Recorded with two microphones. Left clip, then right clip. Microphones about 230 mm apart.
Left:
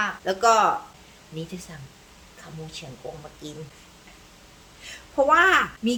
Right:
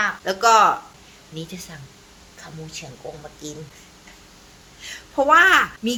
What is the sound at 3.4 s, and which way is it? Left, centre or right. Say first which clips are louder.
Speech: right 4 dB; centre.